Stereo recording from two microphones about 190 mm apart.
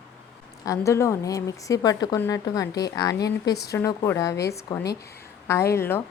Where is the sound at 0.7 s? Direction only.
15° left (ahead or behind).